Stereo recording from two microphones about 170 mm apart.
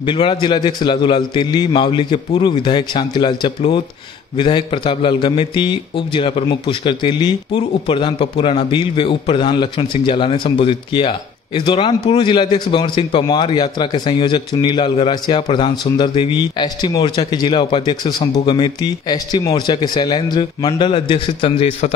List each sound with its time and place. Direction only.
0.0 s a man's voice: 30° left (ahead or behind)